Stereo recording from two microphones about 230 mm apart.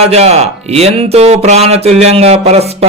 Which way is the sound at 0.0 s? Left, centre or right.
Right.